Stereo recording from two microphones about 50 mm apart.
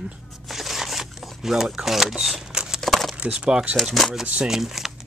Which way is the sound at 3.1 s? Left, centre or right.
Right.